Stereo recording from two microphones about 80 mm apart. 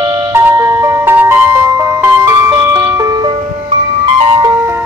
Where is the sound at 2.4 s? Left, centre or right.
Right.